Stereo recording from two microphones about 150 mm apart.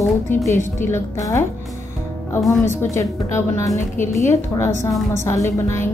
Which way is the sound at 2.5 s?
15° left (ahead or behind).